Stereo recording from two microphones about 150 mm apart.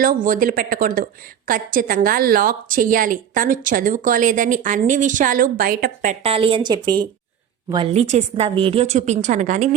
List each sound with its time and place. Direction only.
0.0 s a woman's voice: 65° right (ahead or behind)
6.2 s speech: 35° right (ahead or behind)
7.9 s a woman's voice: 45° right (ahead or behind)